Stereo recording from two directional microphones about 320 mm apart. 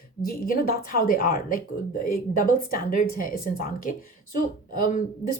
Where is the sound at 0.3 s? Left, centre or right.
Left.